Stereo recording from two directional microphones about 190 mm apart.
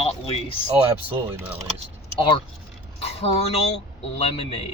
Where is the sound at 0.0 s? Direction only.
30° left (ahead or behind).